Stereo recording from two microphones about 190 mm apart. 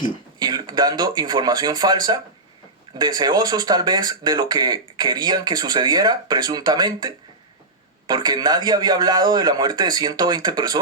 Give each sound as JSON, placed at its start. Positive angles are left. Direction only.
{"t": 0.3, "sound": "speech", "side_deg": -20}